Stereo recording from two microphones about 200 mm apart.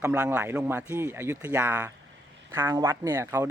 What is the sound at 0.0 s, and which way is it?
Speech, 10° right (ahead or behind).